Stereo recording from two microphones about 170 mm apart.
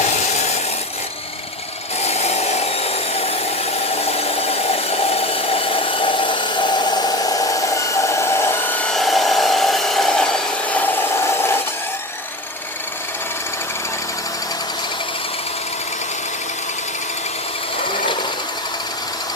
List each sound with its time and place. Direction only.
2.0 s wood: 40° left (ahead or behind)
3.8 s engine: 35° left (ahead or behind); by 11.6 s 15° left (ahead or behind)